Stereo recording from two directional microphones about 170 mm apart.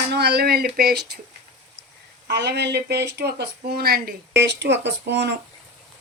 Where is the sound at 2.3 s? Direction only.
85° right.